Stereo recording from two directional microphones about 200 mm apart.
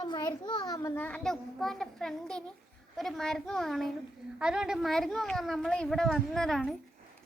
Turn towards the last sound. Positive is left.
turn(degrees=0)  # may be behind; listen again after turning